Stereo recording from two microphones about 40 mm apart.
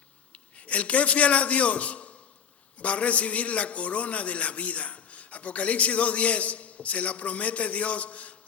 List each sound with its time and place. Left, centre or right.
0.3 s a man's voice: left